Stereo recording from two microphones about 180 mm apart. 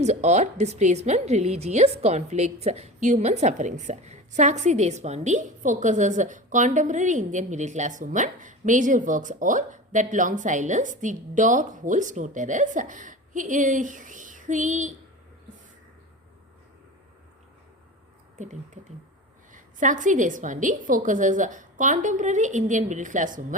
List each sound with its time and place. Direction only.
0.0 s a woman's voice: 40° right (ahead or behind)
18.3 s a woman's voice: 40° right (ahead or behind)